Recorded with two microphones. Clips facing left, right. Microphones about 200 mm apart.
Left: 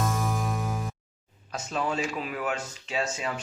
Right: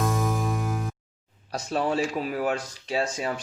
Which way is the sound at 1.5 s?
35° right (ahead or behind).